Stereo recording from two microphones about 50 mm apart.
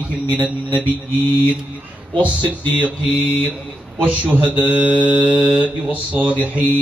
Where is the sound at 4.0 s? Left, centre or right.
Right.